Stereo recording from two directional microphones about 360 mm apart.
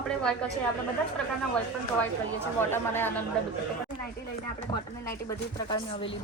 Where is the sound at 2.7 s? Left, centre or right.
Centre.